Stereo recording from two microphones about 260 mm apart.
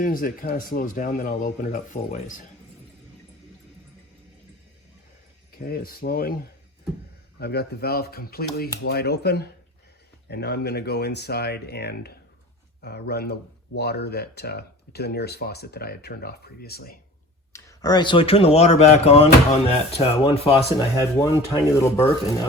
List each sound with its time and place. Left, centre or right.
0.0 s speech: left
5.5 s speech: left
7.3 s speech: left
17.5 s speech: centre
21.0 s rub: centre